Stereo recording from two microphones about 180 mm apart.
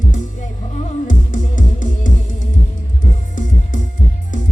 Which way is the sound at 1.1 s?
45° left (ahead or behind).